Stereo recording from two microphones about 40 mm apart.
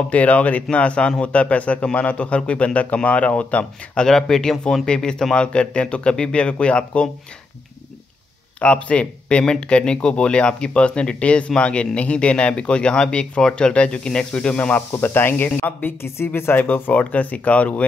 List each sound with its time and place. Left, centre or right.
0.1 s a man's voice: left
3.9 s speech: centre
8.5 s speech: left
14.9 s a man's voice: left